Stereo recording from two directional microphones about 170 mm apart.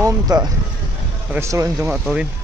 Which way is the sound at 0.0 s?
25° right (ahead or behind).